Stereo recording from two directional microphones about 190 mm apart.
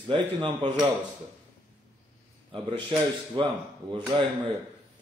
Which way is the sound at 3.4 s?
25° right (ahead or behind).